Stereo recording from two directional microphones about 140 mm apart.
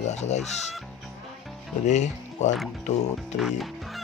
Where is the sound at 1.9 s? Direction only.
60° left (ahead or behind).